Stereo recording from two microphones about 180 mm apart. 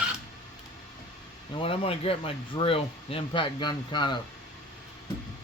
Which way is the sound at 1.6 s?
30° left (ahead or behind).